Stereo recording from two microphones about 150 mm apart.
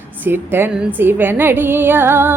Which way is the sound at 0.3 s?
15° right (ahead or behind).